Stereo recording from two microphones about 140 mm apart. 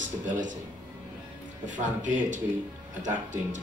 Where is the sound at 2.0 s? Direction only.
65° right (ahead or behind).